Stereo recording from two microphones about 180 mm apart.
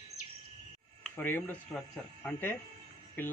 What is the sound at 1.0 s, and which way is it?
Speech, 10° left (ahead or behind).